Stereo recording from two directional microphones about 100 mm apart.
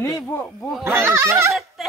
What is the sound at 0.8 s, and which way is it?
Speech, 25° right (ahead or behind).